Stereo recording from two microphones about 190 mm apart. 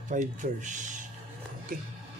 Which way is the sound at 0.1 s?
40° right (ahead or behind).